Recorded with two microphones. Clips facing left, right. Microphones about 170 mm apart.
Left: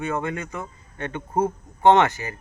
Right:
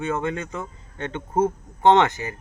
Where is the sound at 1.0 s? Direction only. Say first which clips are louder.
Right 2 dB; 25° right (ahead or behind).